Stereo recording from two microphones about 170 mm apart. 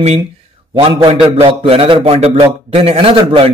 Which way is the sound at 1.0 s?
35° right (ahead or behind).